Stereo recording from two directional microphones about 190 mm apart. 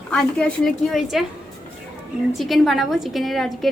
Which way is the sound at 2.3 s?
Centre (ahead or behind).